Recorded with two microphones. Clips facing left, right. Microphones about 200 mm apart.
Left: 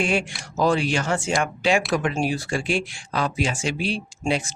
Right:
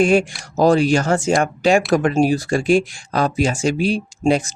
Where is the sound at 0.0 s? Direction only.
40° right (ahead or behind).